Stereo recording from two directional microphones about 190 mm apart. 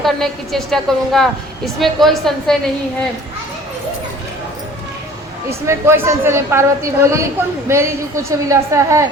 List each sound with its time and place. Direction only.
0.0 s a woman's voice: centre (ahead or behind)
5.5 s a woman's voice: 15° right (ahead or behind)